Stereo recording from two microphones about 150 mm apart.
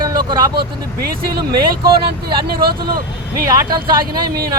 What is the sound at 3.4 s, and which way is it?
Speech, 25° right (ahead or behind).